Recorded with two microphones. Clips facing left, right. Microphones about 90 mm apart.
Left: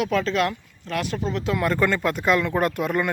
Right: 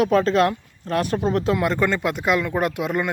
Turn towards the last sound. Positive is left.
turn(degrees=-10)  # may be behind; listen again after turning